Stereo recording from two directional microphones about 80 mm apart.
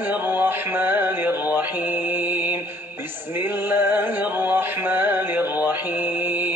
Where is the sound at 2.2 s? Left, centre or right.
Right.